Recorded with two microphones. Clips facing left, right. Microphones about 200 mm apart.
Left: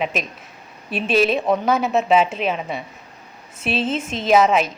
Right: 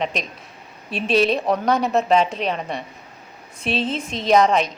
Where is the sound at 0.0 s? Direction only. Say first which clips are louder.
Left 1 dB; 5° left (ahead or behind).